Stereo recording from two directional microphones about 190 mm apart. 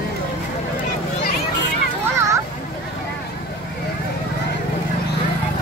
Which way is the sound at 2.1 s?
15° right (ahead or behind).